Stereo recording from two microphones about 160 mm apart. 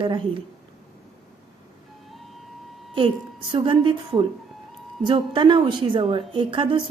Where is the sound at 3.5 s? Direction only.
30° right (ahead or behind).